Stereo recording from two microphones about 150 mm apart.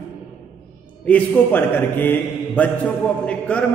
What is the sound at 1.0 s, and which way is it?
A man's voice, 10° left (ahead or behind).